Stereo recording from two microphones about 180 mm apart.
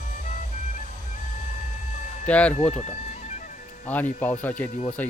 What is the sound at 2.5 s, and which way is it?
Music, 40° left (ahead or behind).